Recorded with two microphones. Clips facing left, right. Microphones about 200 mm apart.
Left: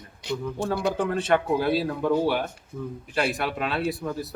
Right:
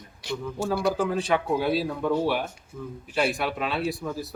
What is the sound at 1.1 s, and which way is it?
Speech, centre (ahead or behind).